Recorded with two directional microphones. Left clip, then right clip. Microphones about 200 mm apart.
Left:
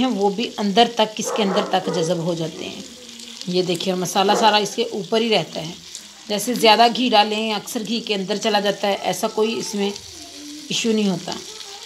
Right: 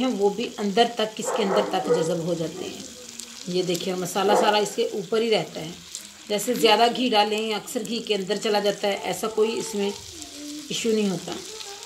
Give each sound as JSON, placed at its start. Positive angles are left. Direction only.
{"t": 0.0, "sound": "a woman's voice", "side_deg": 50}
{"t": 3.5, "sound": "a woman's voice", "side_deg": 45}
{"t": 10.7, "sound": "a woman's voice", "side_deg": 50}